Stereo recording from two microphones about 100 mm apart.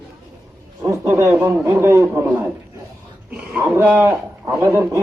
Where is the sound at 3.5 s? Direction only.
15° right (ahead or behind).